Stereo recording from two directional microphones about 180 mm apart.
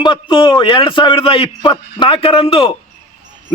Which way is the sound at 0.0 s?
25° left (ahead or behind).